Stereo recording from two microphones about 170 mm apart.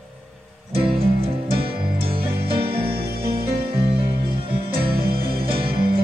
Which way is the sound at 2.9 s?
60° right (ahead or behind).